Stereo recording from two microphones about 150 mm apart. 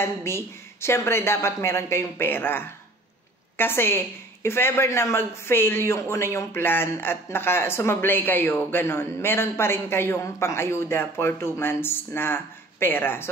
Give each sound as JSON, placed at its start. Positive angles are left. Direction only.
{"t": 0.0, "sound": "a woman's voice", "side_deg": 15}